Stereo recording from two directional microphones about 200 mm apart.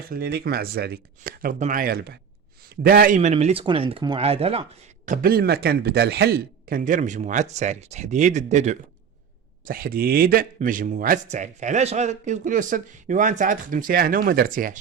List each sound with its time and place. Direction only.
0.0 s speech: 50° right (ahead or behind)
3.2 s speech: 35° right (ahead or behind)
9.6 s speech: 45° right (ahead or behind)